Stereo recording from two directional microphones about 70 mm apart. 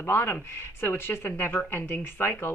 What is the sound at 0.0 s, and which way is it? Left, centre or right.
Speech, left.